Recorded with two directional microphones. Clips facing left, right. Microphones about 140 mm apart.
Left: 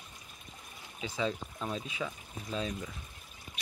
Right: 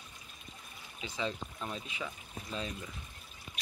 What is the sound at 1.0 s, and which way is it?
Speech, 5° left (ahead or behind).